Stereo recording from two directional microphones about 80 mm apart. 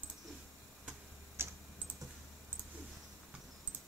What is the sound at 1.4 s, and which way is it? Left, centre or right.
Typing, right.